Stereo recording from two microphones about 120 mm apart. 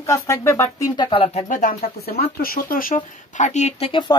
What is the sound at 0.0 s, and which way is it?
Speech, 25° left (ahead or behind).